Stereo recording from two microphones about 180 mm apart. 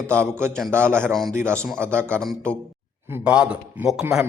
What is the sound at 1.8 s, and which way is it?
Speech, 15° right (ahead or behind).